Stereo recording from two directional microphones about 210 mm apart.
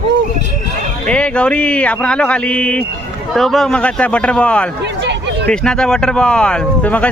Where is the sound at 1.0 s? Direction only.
5° left (ahead or behind).